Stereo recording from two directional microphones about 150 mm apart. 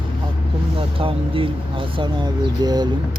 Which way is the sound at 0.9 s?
35° right (ahead or behind).